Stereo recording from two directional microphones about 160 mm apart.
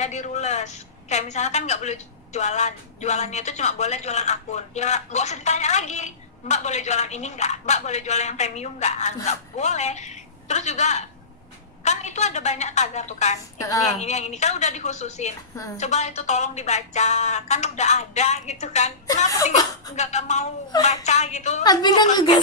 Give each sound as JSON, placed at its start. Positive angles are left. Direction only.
{"t": 0.0, "sound": "a woman's voice", "side_deg": 45}
{"t": 13.6, "sound": "a woman's voice", "side_deg": 20}
{"t": 13.9, "sound": "a woman's voice", "side_deg": 45}
{"t": 20.0, "sound": "a woman's voice", "side_deg": 45}
{"t": 21.6, "sound": "a woman's voice", "side_deg": 25}